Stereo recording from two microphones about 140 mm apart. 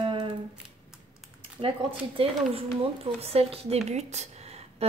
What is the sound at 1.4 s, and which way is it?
A woman's voice, 40° right (ahead or behind).